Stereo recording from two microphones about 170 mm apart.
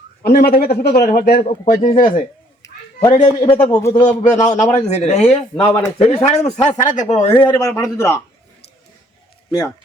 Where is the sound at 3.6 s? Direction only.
15° left (ahead or behind).